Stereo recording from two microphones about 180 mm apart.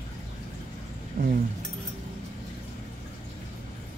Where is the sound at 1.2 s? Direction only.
40° right (ahead or behind).